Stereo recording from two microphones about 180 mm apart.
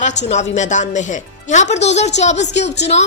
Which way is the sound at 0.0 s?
40° left (ahead or behind).